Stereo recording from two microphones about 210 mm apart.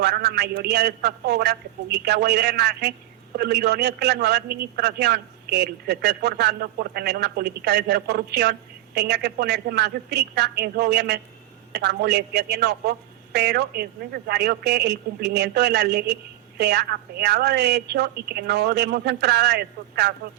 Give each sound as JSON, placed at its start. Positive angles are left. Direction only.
{"t": 0.0, "sound": "a man's voice", "side_deg": -50}